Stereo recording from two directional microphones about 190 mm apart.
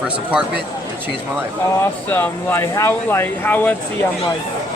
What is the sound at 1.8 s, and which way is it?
Speech, 10° left (ahead or behind).